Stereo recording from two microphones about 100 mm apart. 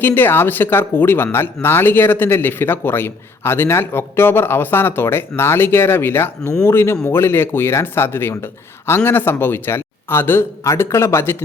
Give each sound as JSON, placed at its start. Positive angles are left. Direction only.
{"t": 0.0, "sound": "speech", "side_deg": 20}